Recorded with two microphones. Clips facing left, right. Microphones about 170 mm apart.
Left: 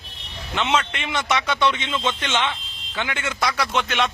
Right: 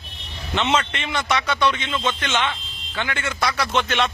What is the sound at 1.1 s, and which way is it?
A man's voice, 20° left (ahead or behind).